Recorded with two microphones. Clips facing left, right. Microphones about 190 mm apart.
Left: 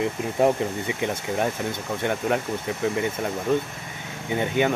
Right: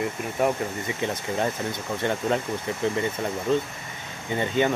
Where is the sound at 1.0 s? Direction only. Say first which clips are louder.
Left 1 dB; 15° left (ahead or behind).